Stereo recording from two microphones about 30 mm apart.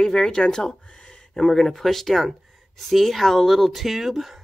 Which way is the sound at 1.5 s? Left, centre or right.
Centre.